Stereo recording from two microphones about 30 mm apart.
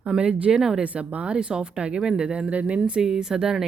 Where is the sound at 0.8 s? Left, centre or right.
Right.